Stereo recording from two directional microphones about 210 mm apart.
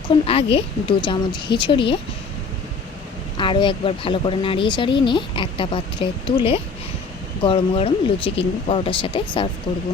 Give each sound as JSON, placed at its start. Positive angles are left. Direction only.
{"t": 0.1, "sound": "speech", "side_deg": 25}
{"t": 3.3, "sound": "speech", "side_deg": 25}